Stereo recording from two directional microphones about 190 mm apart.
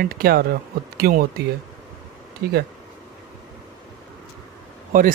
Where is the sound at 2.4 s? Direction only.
60° right (ahead or behind).